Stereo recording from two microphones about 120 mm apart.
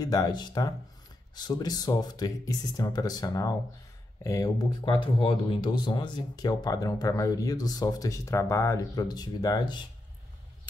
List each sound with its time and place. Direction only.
0.0 s speech: 30° left (ahead or behind)
4.8 s speech: 45° left (ahead or behind)